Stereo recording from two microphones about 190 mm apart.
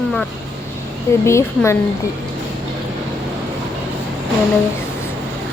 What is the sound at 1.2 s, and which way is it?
Speech, 15° left (ahead or behind).